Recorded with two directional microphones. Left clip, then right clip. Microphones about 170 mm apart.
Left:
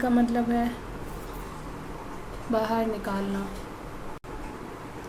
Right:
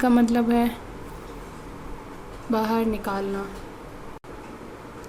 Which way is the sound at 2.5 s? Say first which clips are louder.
Right 2 dB; 45° right (ahead or behind).